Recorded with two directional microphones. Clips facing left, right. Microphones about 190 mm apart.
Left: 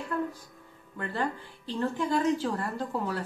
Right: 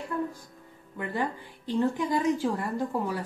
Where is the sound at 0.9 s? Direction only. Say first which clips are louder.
Right 1 dB; 15° right (ahead or behind).